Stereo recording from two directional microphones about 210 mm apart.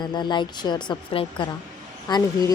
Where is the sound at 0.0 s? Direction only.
20° left (ahead or behind).